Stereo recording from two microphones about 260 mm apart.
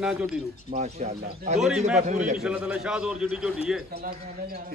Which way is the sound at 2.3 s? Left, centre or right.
Centre.